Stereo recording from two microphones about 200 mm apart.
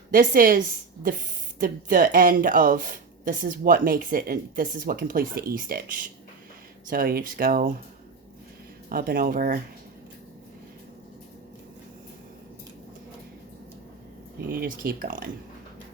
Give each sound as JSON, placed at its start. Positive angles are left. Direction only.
{"t": 0.1, "sound": "speech", "side_deg": -45}
{"t": 8.9, "sound": "speech", "side_deg": -45}
{"t": 14.5, "sound": "speech", "side_deg": -45}